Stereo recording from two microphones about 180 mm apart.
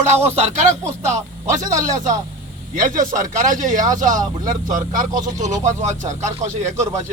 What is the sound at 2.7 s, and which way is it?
Speech, 45° right (ahead or behind).